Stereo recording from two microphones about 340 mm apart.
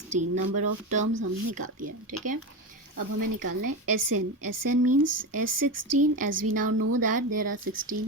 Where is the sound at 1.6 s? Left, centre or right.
Right.